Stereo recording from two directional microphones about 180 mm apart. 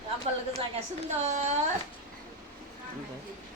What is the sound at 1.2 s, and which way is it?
Speech, 40° right (ahead or behind).